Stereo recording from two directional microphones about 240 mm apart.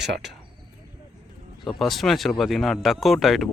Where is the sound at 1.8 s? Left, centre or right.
Centre.